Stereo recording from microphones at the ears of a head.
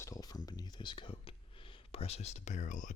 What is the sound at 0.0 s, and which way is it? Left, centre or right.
Speech, left.